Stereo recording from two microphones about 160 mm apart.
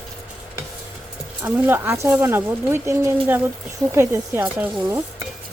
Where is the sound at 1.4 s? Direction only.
15° right (ahead or behind).